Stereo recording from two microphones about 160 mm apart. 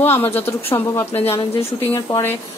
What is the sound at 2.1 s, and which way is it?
Speech, 15° left (ahead or behind).